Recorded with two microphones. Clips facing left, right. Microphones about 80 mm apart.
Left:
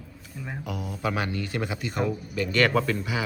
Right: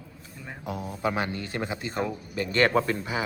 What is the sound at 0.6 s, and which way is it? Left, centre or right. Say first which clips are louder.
Speech: right 2 dB; right.